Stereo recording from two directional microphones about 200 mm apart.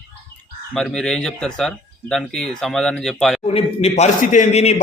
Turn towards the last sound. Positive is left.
turn(degrees=35)  # may be behind; listen again after turning